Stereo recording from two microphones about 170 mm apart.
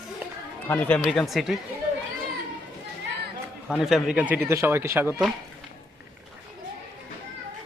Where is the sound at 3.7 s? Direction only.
Centre (ahead or behind).